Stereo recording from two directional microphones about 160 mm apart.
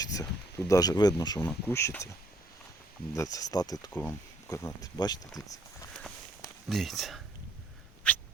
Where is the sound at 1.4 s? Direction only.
10° left (ahead or behind).